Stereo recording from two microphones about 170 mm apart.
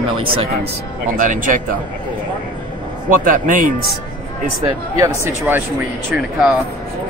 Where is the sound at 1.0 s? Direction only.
50° right (ahead or behind).